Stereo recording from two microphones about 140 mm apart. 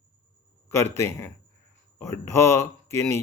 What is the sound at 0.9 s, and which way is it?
Speech, 20° left (ahead or behind).